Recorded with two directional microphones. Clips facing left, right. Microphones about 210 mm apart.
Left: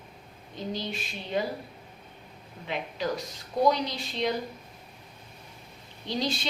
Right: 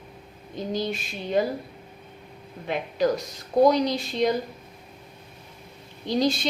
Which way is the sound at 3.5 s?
45° right (ahead or behind).